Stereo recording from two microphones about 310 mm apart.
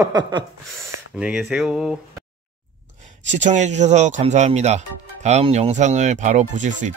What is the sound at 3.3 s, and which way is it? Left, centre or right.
Speech, right.